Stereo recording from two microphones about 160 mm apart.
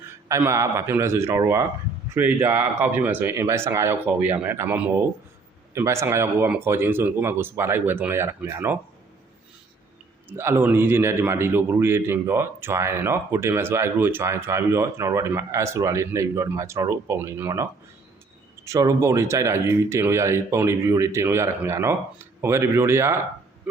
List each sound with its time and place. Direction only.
0.3 s a man's voice: 20° right (ahead or behind)
10.2 s a man's voice: 15° right (ahead or behind)